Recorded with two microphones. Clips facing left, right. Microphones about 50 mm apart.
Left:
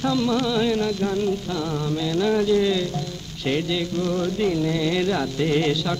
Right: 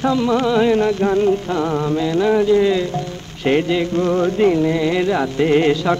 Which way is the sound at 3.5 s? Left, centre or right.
Right.